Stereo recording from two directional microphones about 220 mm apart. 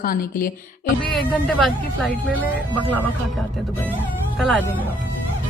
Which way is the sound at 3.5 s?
Centre (ahead or behind).